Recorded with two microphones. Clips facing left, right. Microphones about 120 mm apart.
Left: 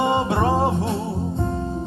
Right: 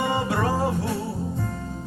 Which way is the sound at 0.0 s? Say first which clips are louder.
Left 4 dB; 25° left (ahead or behind).